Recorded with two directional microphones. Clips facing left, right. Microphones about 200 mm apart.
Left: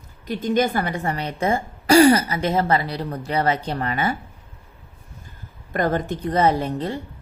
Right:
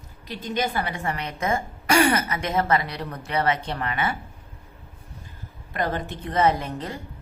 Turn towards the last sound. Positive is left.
turn(degrees=30)  # may be behind; listen again after turning